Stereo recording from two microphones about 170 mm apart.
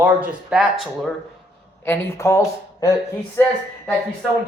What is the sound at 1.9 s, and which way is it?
Speech, 15° left (ahead or behind).